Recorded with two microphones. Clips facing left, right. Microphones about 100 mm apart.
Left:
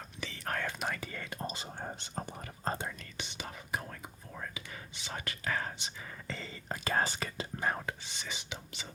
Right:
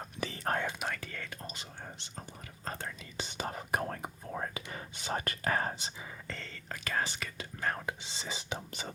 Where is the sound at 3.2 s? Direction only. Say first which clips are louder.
Right 5 dB; 40° right (ahead or behind).